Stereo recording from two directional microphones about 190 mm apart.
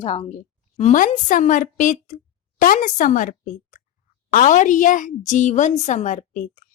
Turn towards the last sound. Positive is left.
turn(degrees=45)  # may be behind; listen again after turning